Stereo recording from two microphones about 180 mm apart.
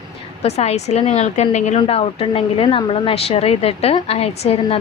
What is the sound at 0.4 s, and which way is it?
A woman's voice, 35° left (ahead or behind).